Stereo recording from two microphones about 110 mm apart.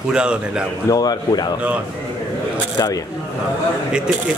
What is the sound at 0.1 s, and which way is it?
Speech, 10° right (ahead or behind).